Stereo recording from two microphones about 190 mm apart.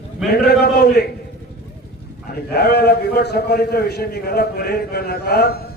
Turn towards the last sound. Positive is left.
turn(degrees=55)  # may be behind; listen again after turning